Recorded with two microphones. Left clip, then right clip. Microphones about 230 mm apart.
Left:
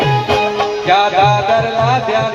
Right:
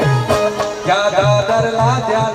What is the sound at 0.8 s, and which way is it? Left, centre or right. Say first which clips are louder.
Music: left 3 dB; right.